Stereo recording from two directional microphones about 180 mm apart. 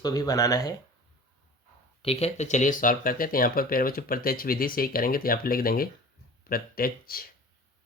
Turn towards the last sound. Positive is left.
turn(degrees=55)  # may be behind; listen again after turning